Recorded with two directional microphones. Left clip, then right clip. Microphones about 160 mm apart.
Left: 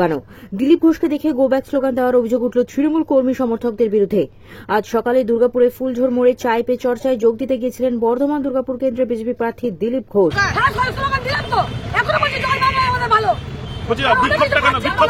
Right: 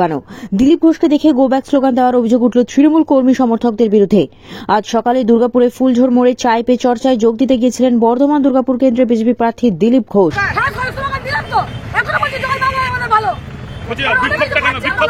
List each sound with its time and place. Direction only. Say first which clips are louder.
0.0 s speech: right 3 dB; 30° right (ahead or behind)
10.5 s hubbub: even; 5° left (ahead or behind)